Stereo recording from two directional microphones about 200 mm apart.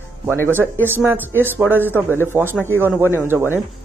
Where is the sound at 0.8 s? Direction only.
10° right (ahead or behind).